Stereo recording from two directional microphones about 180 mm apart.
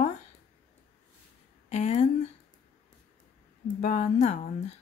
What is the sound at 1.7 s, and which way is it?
Speech, 40° left (ahead or behind).